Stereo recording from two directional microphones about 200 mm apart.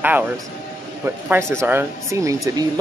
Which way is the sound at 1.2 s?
10° right (ahead or behind).